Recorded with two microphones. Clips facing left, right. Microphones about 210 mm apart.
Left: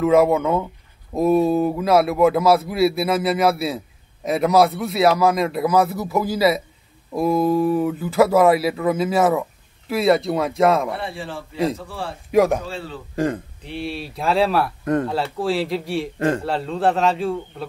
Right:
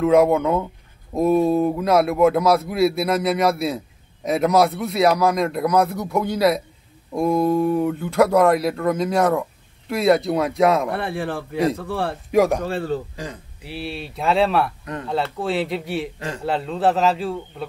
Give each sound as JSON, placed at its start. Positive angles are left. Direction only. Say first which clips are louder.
{"t": 0.0, "sound": "speech", "louder": "even", "side_deg": 0}
{"t": 10.9, "sound": "speech", "louder": "right 4 dB", "side_deg": -60}
{"t": 12.3, "sound": "speech", "louder": "left 1 dB", "side_deg": 0}
{"t": 12.6, "sound": "a man's voice", "louder": "right 8 dB", "side_deg": -50}
{"t": 13.1, "sound": "speech", "louder": "left 11 dB", "side_deg": 55}
{"t": 13.6, "sound": "speech", "louder": "left 2 dB", "side_deg": -5}